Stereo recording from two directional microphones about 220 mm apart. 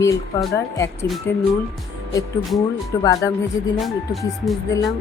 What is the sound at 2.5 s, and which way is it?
Speech, 15° left (ahead or behind).